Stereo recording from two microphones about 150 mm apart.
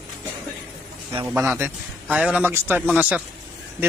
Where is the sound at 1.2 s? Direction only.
15° right (ahead or behind).